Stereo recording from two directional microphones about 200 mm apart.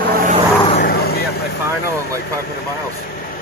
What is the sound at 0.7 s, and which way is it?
Vehicle, 50° left (ahead or behind).